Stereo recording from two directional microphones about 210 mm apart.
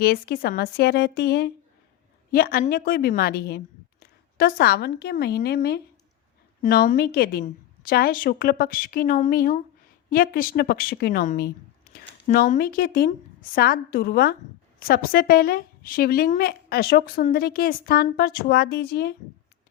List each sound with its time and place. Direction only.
0.0 s a woman's voice: 45° left (ahead or behind)